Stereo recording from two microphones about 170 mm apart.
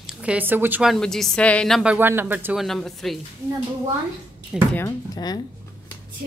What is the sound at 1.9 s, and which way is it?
Speech, 15° right (ahead or behind).